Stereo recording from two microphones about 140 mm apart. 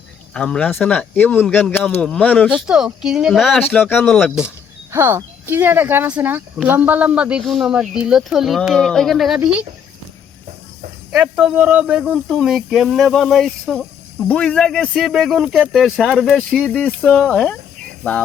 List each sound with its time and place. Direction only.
0.3 s speech: 5° left (ahead or behind)
2.5 s speech: 5° right (ahead or behind)
3.8 s speech: 15° left (ahead or behind)
4.2 s speech: 5° right (ahead or behind)
4.9 s speech: 20° right (ahead or behind)
11.1 s speech: 5° right (ahead or behind)